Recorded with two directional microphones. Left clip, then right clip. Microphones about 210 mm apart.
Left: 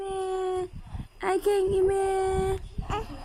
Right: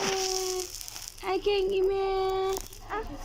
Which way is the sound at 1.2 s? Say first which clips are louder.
Left 3 dB; 30° left (ahead or behind).